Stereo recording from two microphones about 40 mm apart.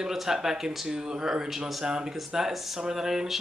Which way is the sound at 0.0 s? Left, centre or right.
Centre.